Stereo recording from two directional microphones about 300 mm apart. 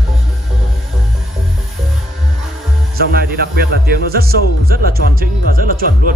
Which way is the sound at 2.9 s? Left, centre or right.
Right.